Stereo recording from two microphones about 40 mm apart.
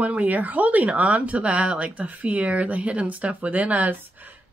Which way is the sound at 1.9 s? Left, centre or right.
Right.